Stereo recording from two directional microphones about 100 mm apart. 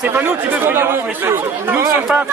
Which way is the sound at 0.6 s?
20° right (ahead or behind).